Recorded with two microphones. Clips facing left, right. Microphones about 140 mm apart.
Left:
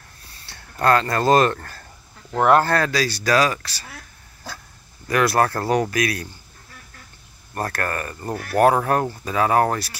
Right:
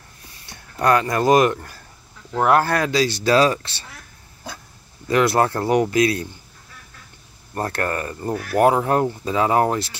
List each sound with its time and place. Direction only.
0.5 s speech: 15° right (ahead or behind)
5.0 s speech: 25° right (ahead or behind)
7.5 s speech: 25° right (ahead or behind)